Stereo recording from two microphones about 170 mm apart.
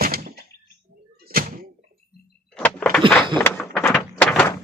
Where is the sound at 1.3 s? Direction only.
60° right (ahead or behind).